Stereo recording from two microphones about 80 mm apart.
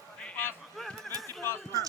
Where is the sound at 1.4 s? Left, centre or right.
Left.